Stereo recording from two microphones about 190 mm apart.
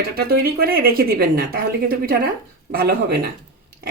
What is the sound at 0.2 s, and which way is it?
Speech, 55° right (ahead or behind).